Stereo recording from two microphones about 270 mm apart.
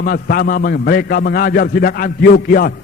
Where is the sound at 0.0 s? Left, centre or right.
Left.